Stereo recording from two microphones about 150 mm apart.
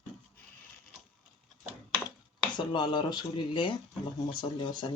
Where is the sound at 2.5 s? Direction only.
30° left (ahead or behind).